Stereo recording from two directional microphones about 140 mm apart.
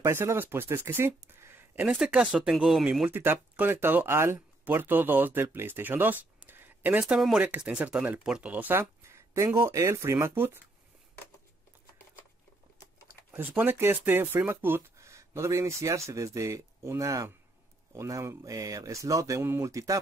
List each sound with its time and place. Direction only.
0.0 s speech: 20° right (ahead or behind)
13.3 s speech: 15° right (ahead or behind)